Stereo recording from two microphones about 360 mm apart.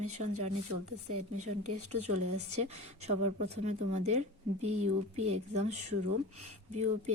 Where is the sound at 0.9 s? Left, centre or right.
Right.